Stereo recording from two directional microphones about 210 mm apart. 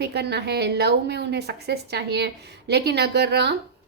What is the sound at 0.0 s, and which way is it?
A woman's voice, 50° right (ahead or behind).